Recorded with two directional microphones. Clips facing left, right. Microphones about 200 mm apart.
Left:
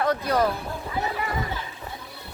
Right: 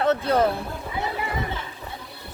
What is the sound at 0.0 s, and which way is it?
Speech, 25° right (ahead or behind).